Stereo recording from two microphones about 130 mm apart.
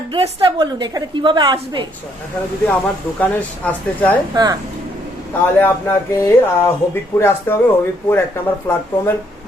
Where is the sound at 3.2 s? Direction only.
10° left (ahead or behind).